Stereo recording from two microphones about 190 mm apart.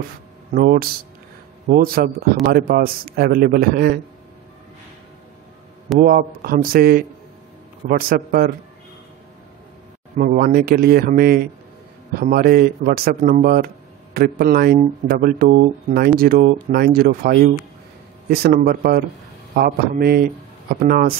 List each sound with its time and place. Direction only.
0.5 s speech: 45° right (ahead or behind)
5.9 s speech: 50° right (ahead or behind)
10.1 s speech: 50° right (ahead or behind)